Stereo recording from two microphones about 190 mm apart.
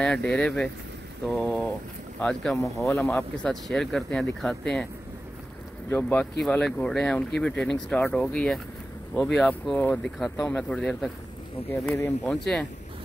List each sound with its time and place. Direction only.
0.0 s speech: 5° left (ahead or behind)
5.9 s speech: 10° left (ahead or behind)